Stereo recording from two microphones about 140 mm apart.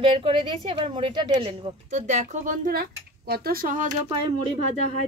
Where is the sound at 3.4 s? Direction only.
90° right.